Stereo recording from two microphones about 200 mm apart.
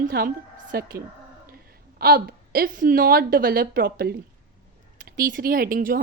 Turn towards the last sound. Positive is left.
turn(degrees=-45)  # may be behind; listen again after turning